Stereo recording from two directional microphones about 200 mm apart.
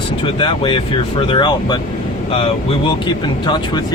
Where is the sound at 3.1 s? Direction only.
20° left (ahead or behind).